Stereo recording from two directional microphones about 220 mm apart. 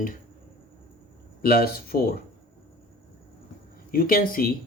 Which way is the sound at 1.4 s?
45° left (ahead or behind).